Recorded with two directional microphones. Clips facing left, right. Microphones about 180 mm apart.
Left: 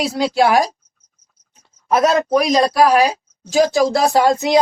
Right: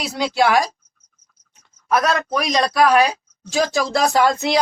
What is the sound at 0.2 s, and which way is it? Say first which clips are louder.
Speech: left 2 dB; 30° left (ahead or behind).